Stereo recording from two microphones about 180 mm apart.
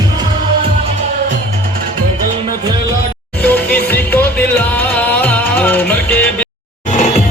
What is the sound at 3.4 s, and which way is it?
Music, 10° left (ahead or behind).